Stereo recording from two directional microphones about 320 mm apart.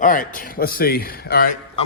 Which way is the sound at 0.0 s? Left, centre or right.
Left.